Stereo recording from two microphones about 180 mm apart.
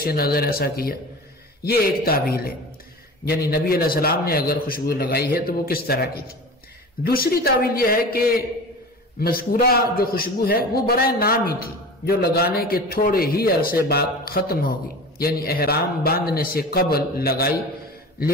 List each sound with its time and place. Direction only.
0.0 s a man's voice: 60° left (ahead or behind)